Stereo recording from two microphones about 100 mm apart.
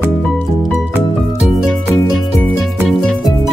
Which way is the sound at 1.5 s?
Centre (ahead or behind).